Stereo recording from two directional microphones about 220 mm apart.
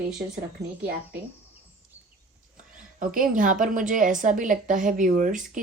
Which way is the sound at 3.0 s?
35° right (ahead or behind).